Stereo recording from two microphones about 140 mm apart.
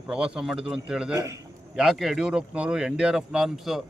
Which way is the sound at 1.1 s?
25° right (ahead or behind).